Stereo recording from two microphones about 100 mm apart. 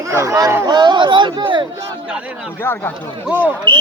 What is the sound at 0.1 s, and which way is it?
Speech, 30° right (ahead or behind).